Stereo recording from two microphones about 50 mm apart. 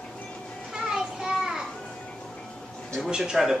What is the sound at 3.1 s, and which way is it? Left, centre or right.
Speech, centre.